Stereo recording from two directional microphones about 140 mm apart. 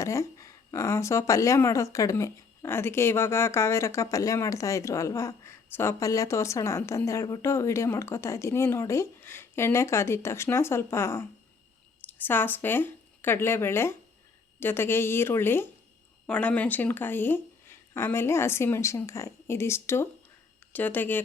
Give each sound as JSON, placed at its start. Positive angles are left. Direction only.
{"t": 0.0, "sound": "speech", "side_deg": 20}